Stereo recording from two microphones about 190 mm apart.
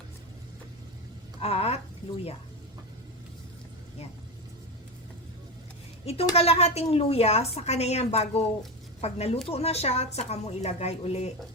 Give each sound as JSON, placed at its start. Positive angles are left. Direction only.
{"t": 1.4, "sound": "speech", "side_deg": 30}
{"t": 6.1, "sound": "a woman's voice", "side_deg": 30}